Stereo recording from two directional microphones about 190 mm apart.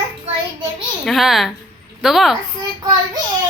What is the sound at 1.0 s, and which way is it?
Speech, centre (ahead or behind).